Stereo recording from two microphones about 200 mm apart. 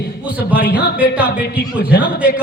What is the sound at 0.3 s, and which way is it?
A man's voice, 10° right (ahead or behind).